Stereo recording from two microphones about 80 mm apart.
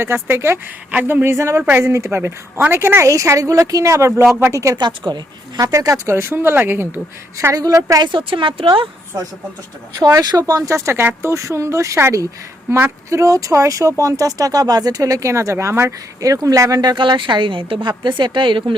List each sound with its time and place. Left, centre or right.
0.0 s speech: right
4.8 s speech: right
5.5 s speech: right
6.1 s speech: right
7.5 s speech: right
8.1 s a woman's voice: right
10.0 s speech: right
10.8 s speech: right
16.2 s speech: right
16.9 s a woman's voice: right
17.8 s a woman's voice: right